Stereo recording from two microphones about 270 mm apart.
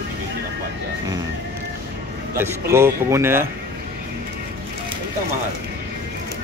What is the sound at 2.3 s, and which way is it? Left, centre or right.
A man's voice, centre.